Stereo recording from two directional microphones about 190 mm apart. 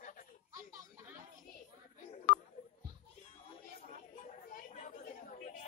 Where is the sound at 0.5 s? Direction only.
15° right (ahead or behind).